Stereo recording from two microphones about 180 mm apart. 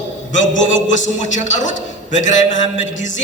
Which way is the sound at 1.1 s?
40° left (ahead or behind).